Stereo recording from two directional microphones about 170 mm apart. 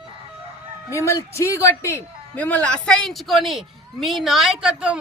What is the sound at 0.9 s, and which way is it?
A woman's voice, 15° left (ahead or behind).